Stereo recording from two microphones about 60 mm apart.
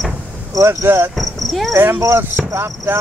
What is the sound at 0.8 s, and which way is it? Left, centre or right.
Speech, right.